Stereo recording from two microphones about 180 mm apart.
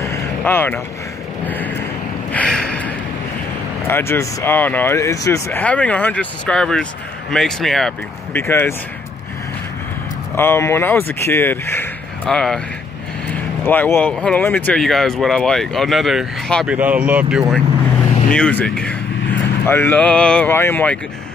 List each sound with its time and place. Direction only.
0.0 s vehicle: 10° left (ahead or behind)
1.5 s speech: 10° left (ahead or behind)
2.3 s a sound: 5° left (ahead or behind)
3.8 s speech: 15° left (ahead or behind)
8.4 s speech: 15° left (ahead or behind)
10.3 s speech: 15° left (ahead or behind); by 17.6 s 5° right (ahead or behind)
18.3 s speech: 5° left (ahead or behind)